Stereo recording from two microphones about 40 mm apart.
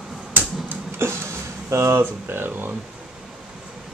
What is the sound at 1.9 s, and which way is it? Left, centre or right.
Speech, right.